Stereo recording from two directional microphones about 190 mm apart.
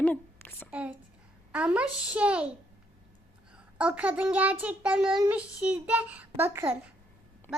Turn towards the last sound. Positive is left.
turn(degrees=-10)  # may be behind; listen again after turning